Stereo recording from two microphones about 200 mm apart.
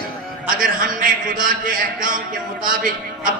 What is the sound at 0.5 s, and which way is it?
A man's voice, 45° right (ahead or behind).